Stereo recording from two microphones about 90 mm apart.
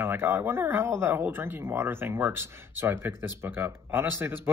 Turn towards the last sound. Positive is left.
turn(degrees=-25)  # may be behind; listen again after turning